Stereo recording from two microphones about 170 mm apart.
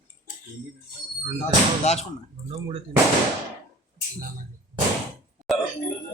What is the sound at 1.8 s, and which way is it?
Speech, 40° left (ahead or behind).